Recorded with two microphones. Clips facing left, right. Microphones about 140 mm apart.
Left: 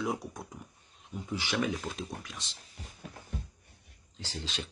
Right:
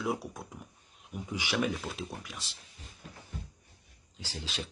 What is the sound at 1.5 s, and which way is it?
Speech, 5° right (ahead or behind).